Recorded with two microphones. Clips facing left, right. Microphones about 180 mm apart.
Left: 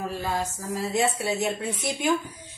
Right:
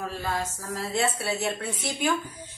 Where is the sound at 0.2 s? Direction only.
15° left (ahead or behind).